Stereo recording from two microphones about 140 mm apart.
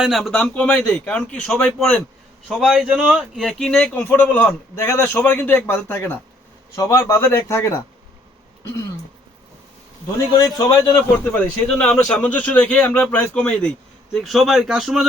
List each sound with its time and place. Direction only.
0.0 s a man's voice: centre (ahead or behind)
4.1 s a man's voice: 15° left (ahead or behind)
10.3 s a man's voice: 20° left (ahead or behind); by 15.0 s 5° right (ahead or behind)